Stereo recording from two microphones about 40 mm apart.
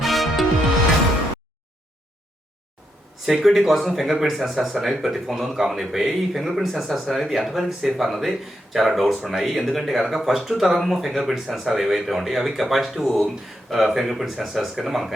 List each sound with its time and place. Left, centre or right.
0.0 s music: centre
3.4 s speech: centre